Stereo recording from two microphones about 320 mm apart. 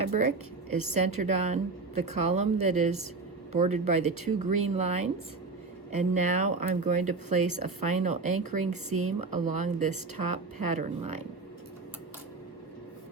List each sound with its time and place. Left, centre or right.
0.1 s a woman's voice: right
7.6 s a woman's voice: right
8.0 s a woman's voice: right
8.9 s a woman's voice: right
9.6 s a woman's voice: right
10.2 s a woman's voice: right
10.7 s a woman's voice: right